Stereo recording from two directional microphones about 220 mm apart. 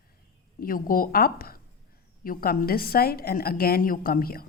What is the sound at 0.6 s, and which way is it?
A woman's voice, 40° left (ahead or behind).